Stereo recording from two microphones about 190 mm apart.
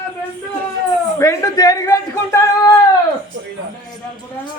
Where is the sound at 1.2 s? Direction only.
15° left (ahead or behind).